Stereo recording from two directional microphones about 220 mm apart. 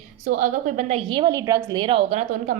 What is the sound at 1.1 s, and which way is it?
A woman's voice, 20° right (ahead or behind).